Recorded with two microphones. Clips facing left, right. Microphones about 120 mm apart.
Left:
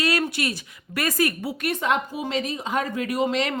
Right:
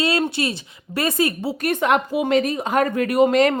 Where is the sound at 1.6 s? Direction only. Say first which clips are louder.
Right 5 dB; 60° right (ahead or behind).